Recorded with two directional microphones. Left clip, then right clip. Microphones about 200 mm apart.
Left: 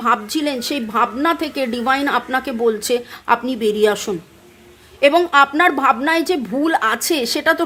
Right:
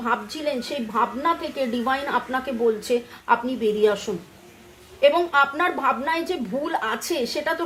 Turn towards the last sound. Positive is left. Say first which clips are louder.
# left 7 dB
turn(degrees=45)  # may be behind; listen again after turning